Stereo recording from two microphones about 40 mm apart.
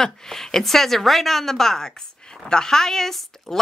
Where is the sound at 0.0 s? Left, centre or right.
Centre.